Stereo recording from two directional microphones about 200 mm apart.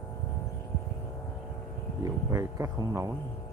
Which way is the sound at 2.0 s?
15° right (ahead or behind).